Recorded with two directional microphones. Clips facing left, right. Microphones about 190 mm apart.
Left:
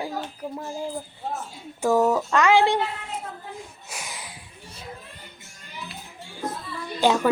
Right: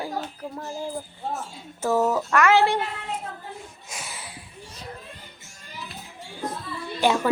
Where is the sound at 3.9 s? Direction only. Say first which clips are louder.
Even; 10° left (ahead or behind).